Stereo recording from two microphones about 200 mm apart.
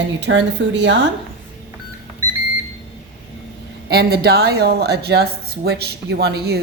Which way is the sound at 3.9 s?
50° right (ahead or behind).